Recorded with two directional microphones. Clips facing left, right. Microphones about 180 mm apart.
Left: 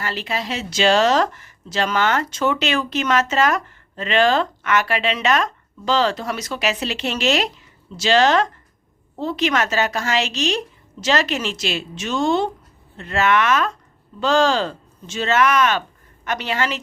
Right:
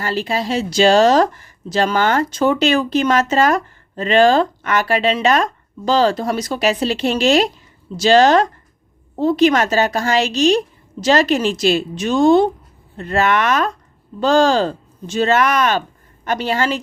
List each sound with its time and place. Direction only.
0.0 s speech: 35° right (ahead or behind)